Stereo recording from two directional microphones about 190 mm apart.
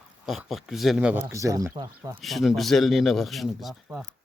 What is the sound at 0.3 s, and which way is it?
Speech, centre (ahead or behind).